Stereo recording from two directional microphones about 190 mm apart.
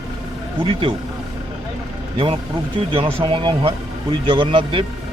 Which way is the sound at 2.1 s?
30° right (ahead or behind).